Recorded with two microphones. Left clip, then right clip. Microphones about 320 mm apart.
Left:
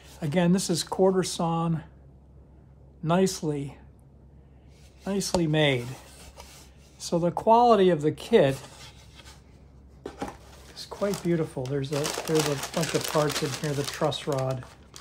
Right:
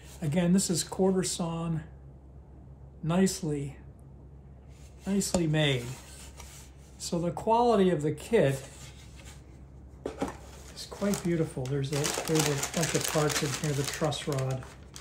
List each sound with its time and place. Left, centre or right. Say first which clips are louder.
0.3 s speech: left 4 dB; left
3.0 s speech: left 5 dB; left
5.0 s speech: left 3 dB; left
7.0 s speech: left 6 dB; left
10.7 s a sound: left 6 dB; centre
11.2 s speech: left 3 dB; left
11.9 s speech: left 3 dB; centre
13.9 s speech: left 5 dB; centre